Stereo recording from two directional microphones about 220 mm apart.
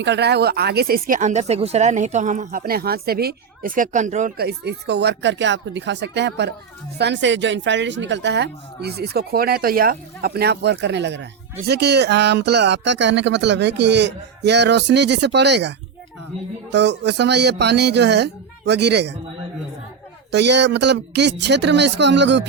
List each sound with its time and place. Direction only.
0.0 s speech: 50° right (ahead or behind); by 4.4 s 35° right (ahead or behind)
4.4 s speech: 50° right (ahead or behind)
16.7 s speech: 50° right (ahead or behind)
20.3 s speech: 50° right (ahead or behind)